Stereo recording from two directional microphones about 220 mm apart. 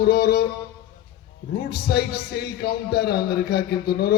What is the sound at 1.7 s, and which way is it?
A man's voice, 45° left (ahead or behind).